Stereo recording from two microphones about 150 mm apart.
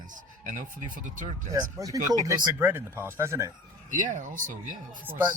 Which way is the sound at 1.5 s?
25° right (ahead or behind).